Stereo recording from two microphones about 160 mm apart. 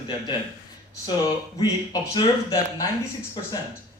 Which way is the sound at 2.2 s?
25° left (ahead or behind).